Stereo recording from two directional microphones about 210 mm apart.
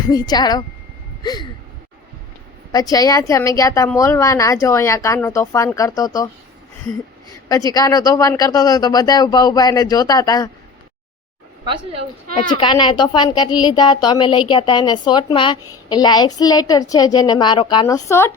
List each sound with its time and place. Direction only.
0.1 s a woman's voice: 20° left (ahead or behind)
1.2 s a sound: 20° left (ahead or behind)
2.7 s speech: 20° left (ahead or behind)
7.3 s speech: 15° left (ahead or behind)
11.6 s a woman's voice: 25° right (ahead or behind)
12.3 s a woman's voice: 25° left (ahead or behind)